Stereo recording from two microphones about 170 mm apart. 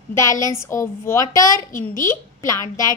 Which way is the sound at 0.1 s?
20° left (ahead or behind).